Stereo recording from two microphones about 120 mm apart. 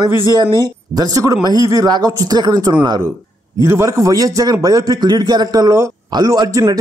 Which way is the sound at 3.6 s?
25° right (ahead or behind).